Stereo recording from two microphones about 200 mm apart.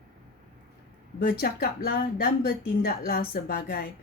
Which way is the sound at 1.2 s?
45° left (ahead or behind).